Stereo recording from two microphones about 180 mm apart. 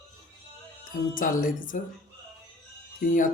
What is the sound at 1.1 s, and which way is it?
Speech, 50° left (ahead or behind).